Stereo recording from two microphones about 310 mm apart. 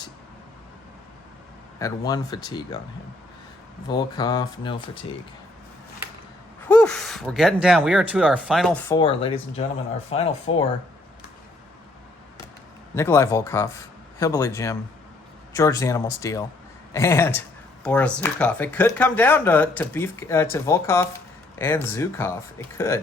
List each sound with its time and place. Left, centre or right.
1.8 s speech: centre
3.8 s speech: centre
6.7 s speech: centre
12.9 s speech: centre